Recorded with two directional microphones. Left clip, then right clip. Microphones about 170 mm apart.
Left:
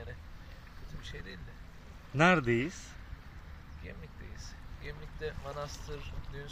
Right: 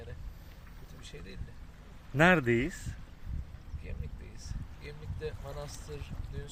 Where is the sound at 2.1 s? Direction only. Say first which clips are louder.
Right 1 dB; 20° right (ahead or behind).